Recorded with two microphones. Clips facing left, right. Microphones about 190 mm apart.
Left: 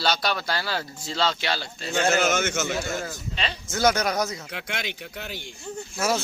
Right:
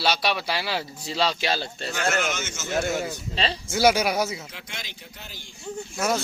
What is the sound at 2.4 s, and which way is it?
Speech, 65° left (ahead or behind).